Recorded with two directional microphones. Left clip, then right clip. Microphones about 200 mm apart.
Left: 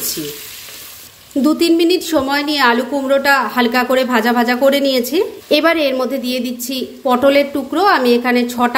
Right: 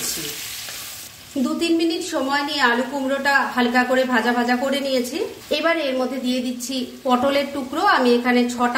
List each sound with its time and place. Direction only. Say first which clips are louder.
1.4 s a woman's voice: left 7 dB; 45° left (ahead or behind)